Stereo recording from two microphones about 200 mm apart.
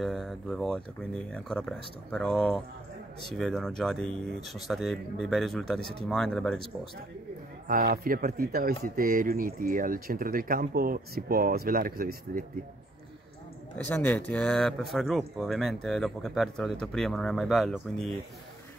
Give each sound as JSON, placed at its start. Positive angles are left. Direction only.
{"t": 0.0, "sound": "speech", "side_deg": 0}
{"t": 4.1, "sound": "speech", "side_deg": -30}
{"t": 4.6, "sound": "speech", "side_deg": 0}
{"t": 7.6, "sound": "speech", "side_deg": -45}
{"t": 13.8, "sound": "speech", "side_deg": 10}